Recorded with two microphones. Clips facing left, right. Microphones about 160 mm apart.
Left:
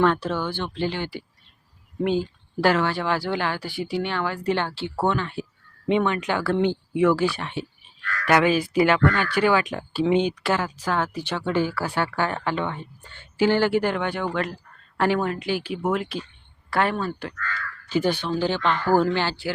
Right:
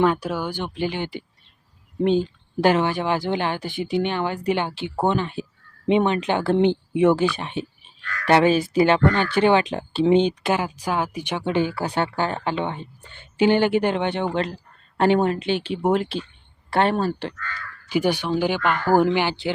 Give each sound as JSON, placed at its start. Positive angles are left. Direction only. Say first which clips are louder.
{"t": 0.0, "sound": "speech", "louder": "right 1 dB", "side_deg": -10}
{"t": 8.3, "sound": "speech", "louder": "right 3 dB", "side_deg": -30}
{"t": 17.8, "sound": "speech", "louder": "right 2 dB", "side_deg": -15}